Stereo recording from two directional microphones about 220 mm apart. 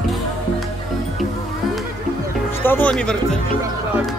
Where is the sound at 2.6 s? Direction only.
10° left (ahead or behind).